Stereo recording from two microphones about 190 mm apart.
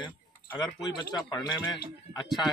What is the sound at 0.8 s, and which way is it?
Speech, 20° left (ahead or behind).